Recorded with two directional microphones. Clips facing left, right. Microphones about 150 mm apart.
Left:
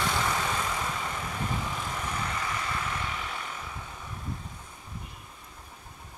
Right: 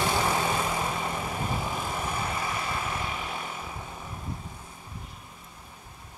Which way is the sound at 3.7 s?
25° right (ahead or behind).